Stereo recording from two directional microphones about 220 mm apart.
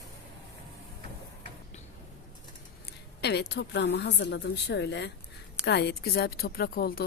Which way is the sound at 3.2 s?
50° left (ahead or behind).